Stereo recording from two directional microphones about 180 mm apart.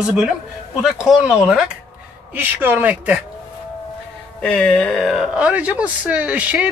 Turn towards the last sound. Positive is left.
turn(degrees=-5)  # may be behind; listen again after turning